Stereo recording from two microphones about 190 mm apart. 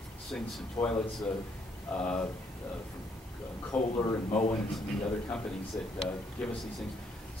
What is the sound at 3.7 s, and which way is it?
Speech, 5° left (ahead or behind).